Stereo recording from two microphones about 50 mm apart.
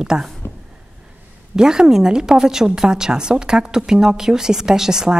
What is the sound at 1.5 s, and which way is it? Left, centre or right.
A woman's voice, centre.